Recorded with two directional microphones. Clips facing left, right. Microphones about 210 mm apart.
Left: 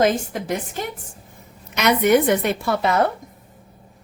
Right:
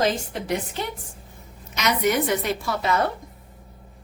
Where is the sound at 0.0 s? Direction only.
45° left (ahead or behind).